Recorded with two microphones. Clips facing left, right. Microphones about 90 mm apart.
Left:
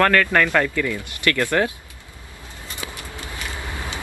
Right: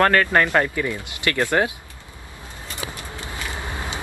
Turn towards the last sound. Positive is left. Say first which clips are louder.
# right 1 dB
turn(degrees=-20)  # may be behind; listen again after turning